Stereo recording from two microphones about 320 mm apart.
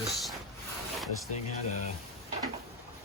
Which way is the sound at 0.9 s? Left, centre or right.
Centre.